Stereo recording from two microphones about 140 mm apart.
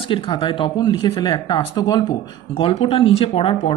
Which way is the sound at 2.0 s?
45° left (ahead or behind).